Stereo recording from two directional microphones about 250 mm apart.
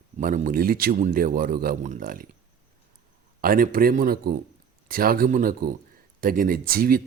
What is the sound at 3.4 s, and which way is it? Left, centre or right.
Speech, right.